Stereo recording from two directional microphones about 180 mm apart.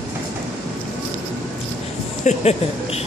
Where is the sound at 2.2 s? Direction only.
35° left (ahead or behind).